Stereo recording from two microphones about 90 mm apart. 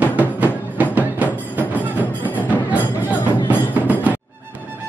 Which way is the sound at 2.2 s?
20° left (ahead or behind).